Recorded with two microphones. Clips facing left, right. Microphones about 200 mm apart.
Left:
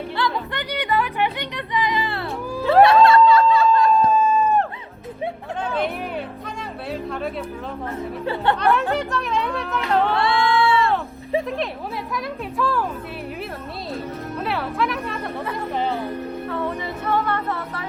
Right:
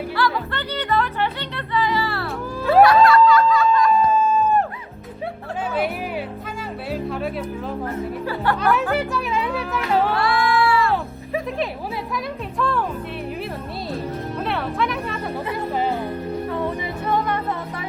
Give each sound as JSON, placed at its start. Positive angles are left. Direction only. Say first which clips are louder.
{"t": 0.2, "sound": "music", "louder": "right 2 dB", "side_deg": 20}
{"t": 2.8, "sound": "music", "louder": "left 1 dB", "side_deg": 25}
{"t": 3.9, "sound": "a sound", "louder": "even", "side_deg": 0}
{"t": 5.7, "sound": "music", "louder": "right 1 dB", "side_deg": -5}
{"t": 8.2, "sound": "speech", "louder": "left 3 dB", "side_deg": 25}
{"t": 8.5, "sound": "speech", "louder": "even", "side_deg": 0}
{"t": 10.2, "sound": "singing", "louder": "even", "side_deg": 25}
{"t": 12.1, "sound": "speech", "louder": "even", "side_deg": 0}
{"t": 14.4, "sound": "speech", "louder": "even", "side_deg": 0}
{"t": 16.5, "sound": "music", "louder": "right 1 dB", "side_deg": -15}